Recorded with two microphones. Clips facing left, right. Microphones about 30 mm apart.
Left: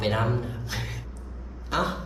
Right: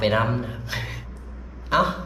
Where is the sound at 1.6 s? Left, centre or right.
Centre.